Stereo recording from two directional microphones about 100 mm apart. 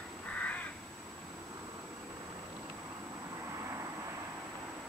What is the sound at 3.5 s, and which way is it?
Vehicle, 30° right (ahead or behind).